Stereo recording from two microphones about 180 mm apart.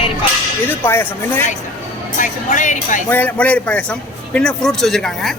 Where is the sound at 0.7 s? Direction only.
10° left (ahead or behind).